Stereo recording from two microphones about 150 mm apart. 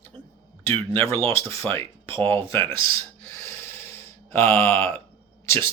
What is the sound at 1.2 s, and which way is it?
Speech, 20° left (ahead or behind).